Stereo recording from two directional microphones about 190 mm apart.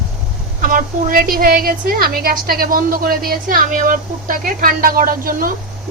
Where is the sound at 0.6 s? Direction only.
50° right (ahead or behind).